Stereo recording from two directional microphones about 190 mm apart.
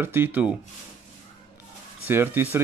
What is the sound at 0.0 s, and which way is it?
Speech, 10° right (ahead or behind).